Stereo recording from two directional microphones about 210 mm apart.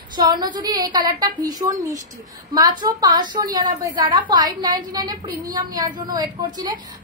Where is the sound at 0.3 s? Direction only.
20° right (ahead or behind).